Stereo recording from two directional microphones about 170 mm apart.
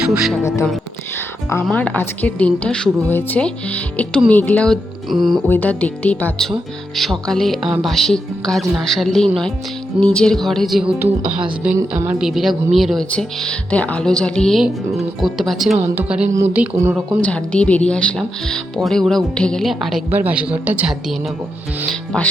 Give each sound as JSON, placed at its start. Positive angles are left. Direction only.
{"t": 0.0, "sound": "speech", "side_deg": -5}
{"t": 1.1, "sound": "music", "side_deg": 15}
{"t": 1.6, "sound": "speech", "side_deg": 10}
{"t": 11.9, "sound": "speech", "side_deg": -5}
{"t": 17.2, "sound": "speech", "side_deg": 5}
{"t": 20.1, "sound": "speech", "side_deg": -10}